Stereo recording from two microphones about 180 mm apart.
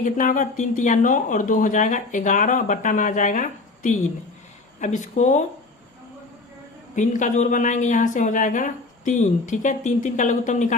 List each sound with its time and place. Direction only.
0.0 s speech: 45° left (ahead or behind)
6.9 s speech: 45° left (ahead or behind)